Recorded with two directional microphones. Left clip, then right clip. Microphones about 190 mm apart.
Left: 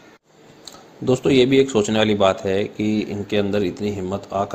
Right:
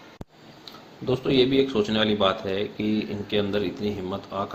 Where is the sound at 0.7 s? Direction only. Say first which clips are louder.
Left 6 dB; 35° left (ahead or behind).